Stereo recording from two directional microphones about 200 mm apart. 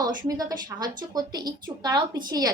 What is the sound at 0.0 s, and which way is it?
A woman's voice, 20° right (ahead or behind).